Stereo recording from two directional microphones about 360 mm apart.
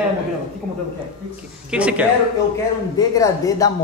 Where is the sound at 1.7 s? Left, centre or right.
Centre.